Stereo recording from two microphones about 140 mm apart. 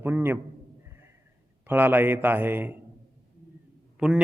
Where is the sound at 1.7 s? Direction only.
15° right (ahead or behind).